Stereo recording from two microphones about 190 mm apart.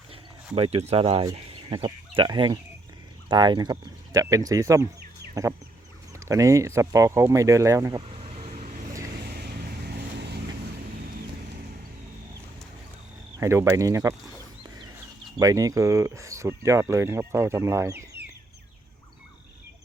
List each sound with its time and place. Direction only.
0.5 s speech: 30° right (ahead or behind); by 4.9 s 15° right (ahead or behind)
5.3 s chicken: 15° right (ahead or behind)
6.1 s speech: 15° right (ahead or behind)
8.2 s vehicle: 35° right (ahead or behind)
9.2 s vehicle: 60° right (ahead or behind)
13.4 s speech: 15° right (ahead or behind)
15.4 s speech: 20° right (ahead or behind)